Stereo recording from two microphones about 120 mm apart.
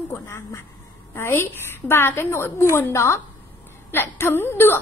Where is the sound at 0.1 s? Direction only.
25° left (ahead or behind).